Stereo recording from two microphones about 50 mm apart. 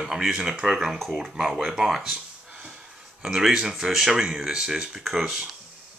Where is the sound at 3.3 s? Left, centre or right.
Centre.